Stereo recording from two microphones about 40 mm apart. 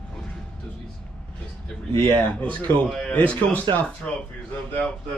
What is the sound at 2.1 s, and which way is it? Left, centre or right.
Speech, left.